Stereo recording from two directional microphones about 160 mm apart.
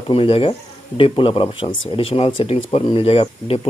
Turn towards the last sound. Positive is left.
turn(degrees=35)  # may be behind; listen again after turning